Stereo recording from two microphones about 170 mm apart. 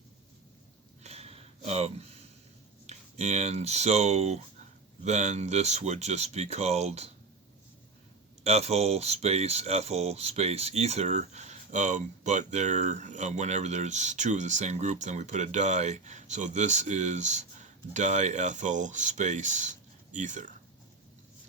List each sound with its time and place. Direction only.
1.0 s a sound: 35° right (ahead or behind)
2.8 s speech: 40° right (ahead or behind)
8.4 s speech: 40° right (ahead or behind)